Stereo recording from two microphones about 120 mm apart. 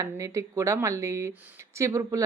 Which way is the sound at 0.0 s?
25° right (ahead or behind).